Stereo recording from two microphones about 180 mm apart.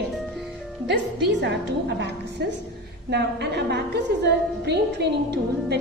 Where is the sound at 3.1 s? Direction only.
70° right (ahead or behind).